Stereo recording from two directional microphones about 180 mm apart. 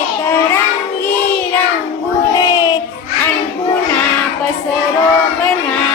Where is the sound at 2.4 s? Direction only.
20° left (ahead or behind).